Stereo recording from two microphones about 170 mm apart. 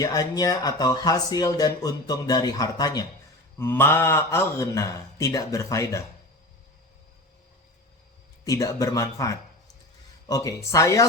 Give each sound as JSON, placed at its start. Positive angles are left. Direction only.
{"t": 0.0, "sound": "a man's voice", "side_deg": 20}
{"t": 8.4, "sound": "speech", "side_deg": 20}